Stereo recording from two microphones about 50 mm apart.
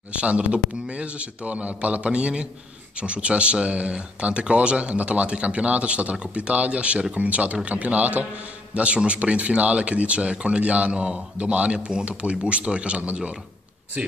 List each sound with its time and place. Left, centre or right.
0.1 s a man's voice: right